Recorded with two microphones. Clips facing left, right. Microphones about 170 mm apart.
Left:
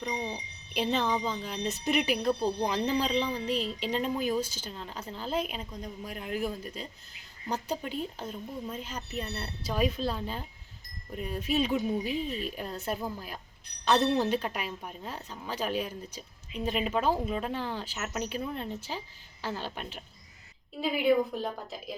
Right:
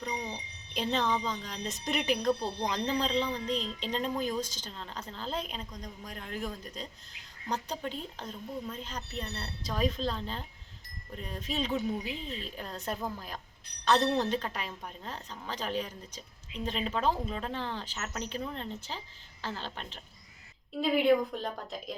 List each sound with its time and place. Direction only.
0.0 s a woman's voice: 5° left (ahead or behind)